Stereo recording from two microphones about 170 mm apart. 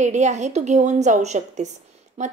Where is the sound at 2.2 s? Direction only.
45° right (ahead or behind).